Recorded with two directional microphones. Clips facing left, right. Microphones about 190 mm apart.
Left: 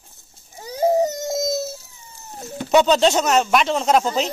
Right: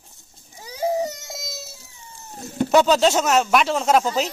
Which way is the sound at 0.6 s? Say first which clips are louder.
Left 5 dB; 45° left (ahead or behind).